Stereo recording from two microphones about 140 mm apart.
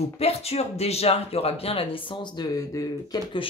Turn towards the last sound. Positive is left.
turn(degrees=30)  # may be behind; listen again after turning